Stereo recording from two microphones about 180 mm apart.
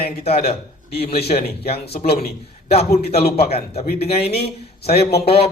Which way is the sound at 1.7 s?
60° left (ahead or behind).